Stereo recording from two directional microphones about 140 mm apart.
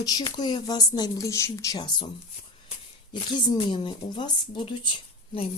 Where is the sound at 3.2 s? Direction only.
35° left (ahead or behind).